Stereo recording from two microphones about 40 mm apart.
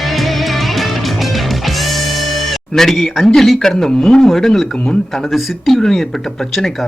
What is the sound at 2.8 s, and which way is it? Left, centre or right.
A man's voice, centre.